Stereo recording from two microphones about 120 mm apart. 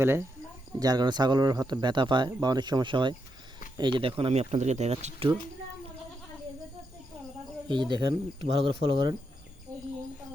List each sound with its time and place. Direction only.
0.0 s speech: 20° right (ahead or behind)
0.8 s speech: 35° right (ahead or behind); by 5.3 s 65° right (ahead or behind)
7.7 s speech: 40° right (ahead or behind)
8.4 s speech: 50° right (ahead or behind)
8.8 s speech: 40° right (ahead or behind)